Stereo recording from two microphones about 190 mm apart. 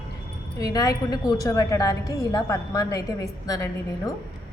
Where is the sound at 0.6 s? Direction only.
20° left (ahead or behind).